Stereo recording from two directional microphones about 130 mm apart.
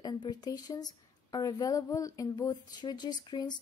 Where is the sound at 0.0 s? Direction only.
30° left (ahead or behind).